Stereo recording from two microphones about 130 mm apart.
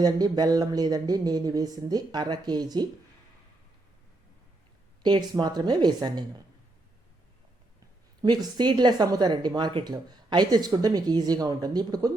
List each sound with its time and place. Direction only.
0.0 s speech: 30° right (ahead or behind)
5.0 s speech: 35° right (ahead or behind)
8.2 s speech: 35° right (ahead or behind)